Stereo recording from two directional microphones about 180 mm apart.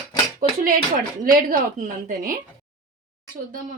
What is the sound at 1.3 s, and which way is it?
Speech, 55° right (ahead or behind).